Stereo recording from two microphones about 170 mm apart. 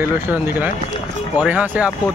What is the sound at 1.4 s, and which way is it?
Speech, 5° right (ahead or behind).